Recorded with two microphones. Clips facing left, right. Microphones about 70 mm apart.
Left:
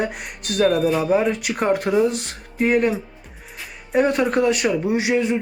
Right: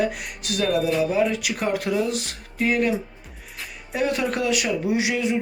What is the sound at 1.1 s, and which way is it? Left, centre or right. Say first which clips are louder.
Speech: left 3 dB; left.